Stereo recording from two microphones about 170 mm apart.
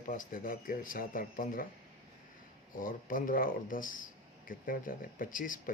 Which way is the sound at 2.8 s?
55° left (ahead or behind).